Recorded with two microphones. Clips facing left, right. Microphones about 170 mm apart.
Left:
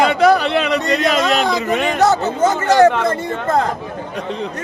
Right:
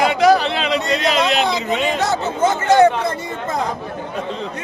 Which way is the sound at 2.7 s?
60° left (ahead or behind).